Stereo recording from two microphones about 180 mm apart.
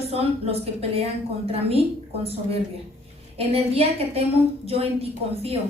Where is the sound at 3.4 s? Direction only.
35° right (ahead or behind).